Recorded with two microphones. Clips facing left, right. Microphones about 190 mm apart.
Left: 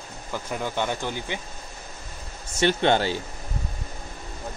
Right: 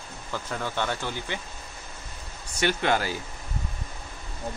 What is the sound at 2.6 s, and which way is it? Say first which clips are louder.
Speech: left 4 dB; 30° left (ahead or behind).